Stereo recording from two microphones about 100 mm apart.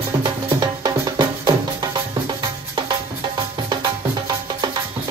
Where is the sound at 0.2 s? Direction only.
45° right (ahead or behind).